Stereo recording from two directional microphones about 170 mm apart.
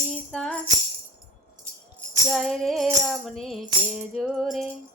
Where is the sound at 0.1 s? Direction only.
5° left (ahead or behind).